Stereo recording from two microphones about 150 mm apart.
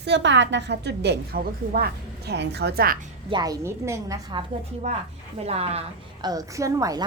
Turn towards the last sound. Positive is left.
turn(degrees=-20)  # may be behind; listen again after turning